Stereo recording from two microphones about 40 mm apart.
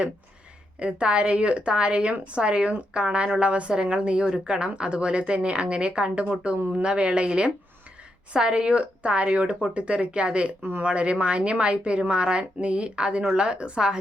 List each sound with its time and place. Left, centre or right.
0.8 s speech: right
10.6 s speech: right
10.8 s speech: right